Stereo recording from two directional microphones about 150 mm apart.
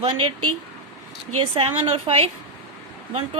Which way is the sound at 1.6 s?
35° right (ahead or behind).